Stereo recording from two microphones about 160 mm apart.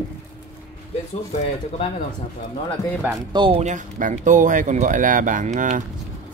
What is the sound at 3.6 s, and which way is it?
Speech, 50° right (ahead or behind).